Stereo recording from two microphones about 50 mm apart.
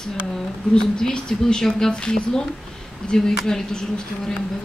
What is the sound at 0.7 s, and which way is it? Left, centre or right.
Speech, centre.